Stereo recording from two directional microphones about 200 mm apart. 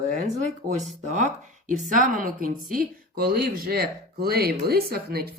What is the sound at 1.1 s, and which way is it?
A woman's voice, 40° right (ahead or behind).